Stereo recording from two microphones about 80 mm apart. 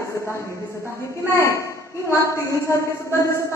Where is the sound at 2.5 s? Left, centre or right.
Left.